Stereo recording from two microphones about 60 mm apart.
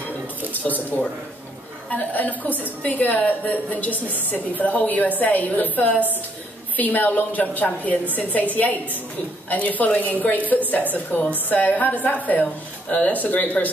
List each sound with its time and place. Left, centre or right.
0.7 s speech: centre
1.9 s a woman's voice: left
9.5 s a woman's voice: left